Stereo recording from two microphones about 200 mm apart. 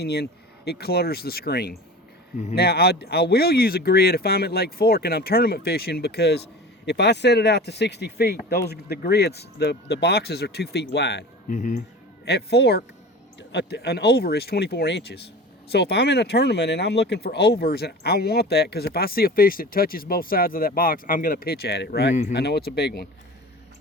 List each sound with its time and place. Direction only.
0.0 s speech: 55° left (ahead or behind)
11.4 s speech: 40° left (ahead or behind)
12.2 s speech: 55° left (ahead or behind)